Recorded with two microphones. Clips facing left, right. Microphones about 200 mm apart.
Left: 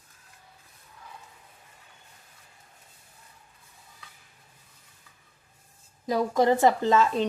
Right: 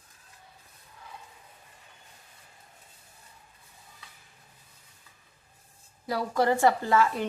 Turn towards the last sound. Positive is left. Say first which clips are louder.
# left 2 dB
turn(degrees=20)  # may be behind; listen again after turning